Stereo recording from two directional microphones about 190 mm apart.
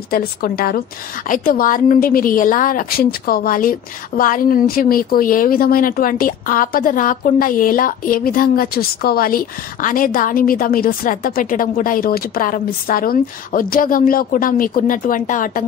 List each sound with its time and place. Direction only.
0.1 s speech: 50° left (ahead or behind)